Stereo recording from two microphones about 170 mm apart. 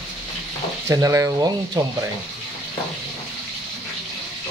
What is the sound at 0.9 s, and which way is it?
Speech, 15° right (ahead or behind).